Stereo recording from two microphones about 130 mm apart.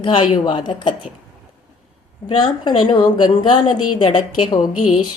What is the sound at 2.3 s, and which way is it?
A woman's voice, 35° left (ahead or behind).